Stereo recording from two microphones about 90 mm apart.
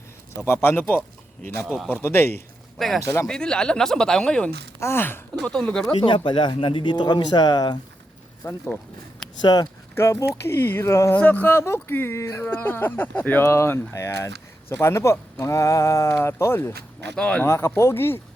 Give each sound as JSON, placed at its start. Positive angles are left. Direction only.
{"t": 0.3, "sound": "speech", "side_deg": 30}
{"t": 1.6, "sound": "speech", "side_deg": 0}
{"t": 1.9, "sound": "speech", "side_deg": 25}
{"t": 2.7, "sound": "speech", "side_deg": 0}
{"t": 3.0, "sound": "speech", "side_deg": 35}
{"t": 3.2, "sound": "speech", "side_deg": 10}
{"t": 4.8, "sound": "speech", "side_deg": 25}
{"t": 5.3, "sound": "speech", "side_deg": 10}
{"t": 6.0, "sound": "speech", "side_deg": 65}
{"t": 8.4, "sound": "speech", "side_deg": 40}
{"t": 9.9, "sound": "speech", "side_deg": 30}
{"t": 11.2, "sound": "speech", "side_deg": 20}
{"t": 17.2, "sound": "speech", "side_deg": 10}
{"t": 17.4, "sound": "speech", "side_deg": 30}